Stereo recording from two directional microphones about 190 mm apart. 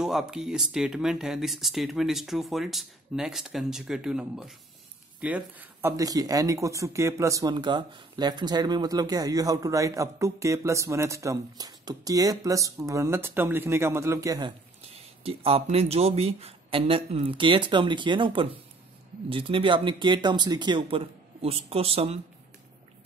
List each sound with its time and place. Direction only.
0.0 s speech: 5° right (ahead or behind)
14.9 s speech: 30° right (ahead or behind)